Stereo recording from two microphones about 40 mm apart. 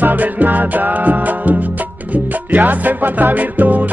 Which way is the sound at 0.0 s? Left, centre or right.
Right.